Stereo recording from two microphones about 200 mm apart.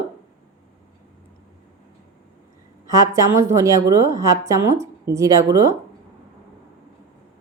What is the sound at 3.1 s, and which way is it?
A woman's voice, 15° right (ahead or behind).